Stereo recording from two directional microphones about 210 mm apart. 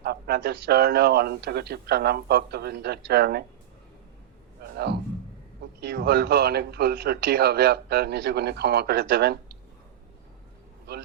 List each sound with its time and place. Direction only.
0.0 s a man's voice: 50° right (ahead or behind)
4.6 s a sound: 50° right (ahead or behind)
5.8 s a man's voice: 50° right (ahead or behind)